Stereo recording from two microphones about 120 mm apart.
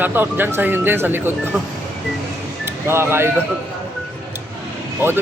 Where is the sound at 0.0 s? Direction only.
15° right (ahead or behind).